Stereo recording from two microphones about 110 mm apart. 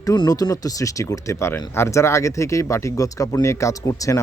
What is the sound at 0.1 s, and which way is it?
Speech, 30° left (ahead or behind).